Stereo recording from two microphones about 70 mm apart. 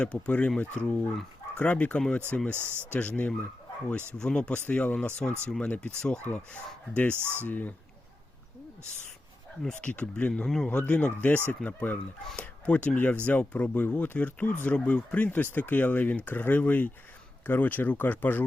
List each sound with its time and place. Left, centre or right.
0.3 s speech: left
4.2 s speech: centre
7.2 s speech: right
7.4 s speech: left
9.6 s speech: centre